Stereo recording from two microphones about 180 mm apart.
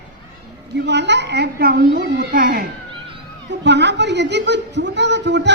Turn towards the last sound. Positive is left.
turn(degrees=-75)  # may be behind; listen again after turning